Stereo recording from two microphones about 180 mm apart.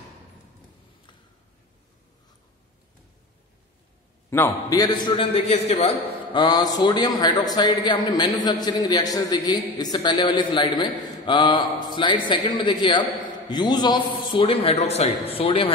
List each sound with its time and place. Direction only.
4.3 s a man's voice: 15° left (ahead or behind); by 15.7 s 30° left (ahead or behind)